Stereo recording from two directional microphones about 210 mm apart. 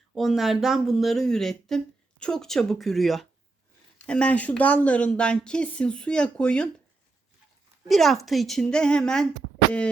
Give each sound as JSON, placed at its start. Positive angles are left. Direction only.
{"t": 0.1, "sound": "speech", "side_deg": 0}
{"t": 7.9, "sound": "speech", "side_deg": 0}